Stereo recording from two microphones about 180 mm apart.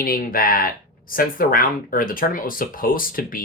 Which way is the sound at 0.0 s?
55° left (ahead or behind).